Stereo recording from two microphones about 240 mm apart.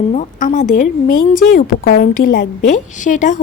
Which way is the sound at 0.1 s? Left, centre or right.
Left.